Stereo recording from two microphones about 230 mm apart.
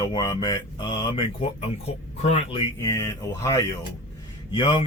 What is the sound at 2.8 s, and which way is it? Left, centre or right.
Speech, centre.